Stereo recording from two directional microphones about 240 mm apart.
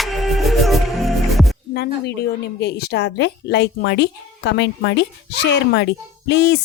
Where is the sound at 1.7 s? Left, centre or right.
Left.